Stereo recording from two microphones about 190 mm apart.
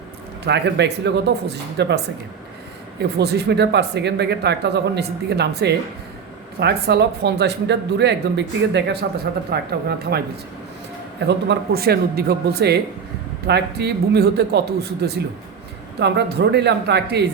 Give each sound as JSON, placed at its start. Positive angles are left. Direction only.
{"t": 0.4, "sound": "speech", "side_deg": -65}
{"t": 3.2, "sound": "speech", "side_deg": -60}
{"t": 11.3, "sound": "speech", "side_deg": -60}